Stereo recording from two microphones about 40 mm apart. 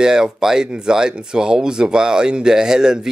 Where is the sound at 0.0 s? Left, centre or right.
Centre.